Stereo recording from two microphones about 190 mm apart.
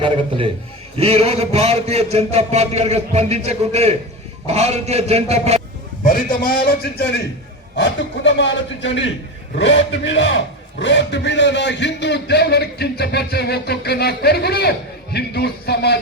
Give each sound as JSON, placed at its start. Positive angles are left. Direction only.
{"t": 0.0, "sound": "a man's voice", "side_deg": -30}
{"t": 6.0, "sound": "a man's voice", "side_deg": 45}
{"t": 7.8, "sound": "a man's voice", "side_deg": 70}